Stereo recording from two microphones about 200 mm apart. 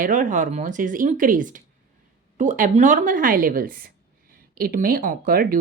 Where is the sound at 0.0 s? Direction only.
40° right (ahead or behind).